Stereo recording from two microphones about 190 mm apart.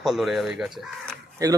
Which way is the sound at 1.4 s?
15° right (ahead or behind).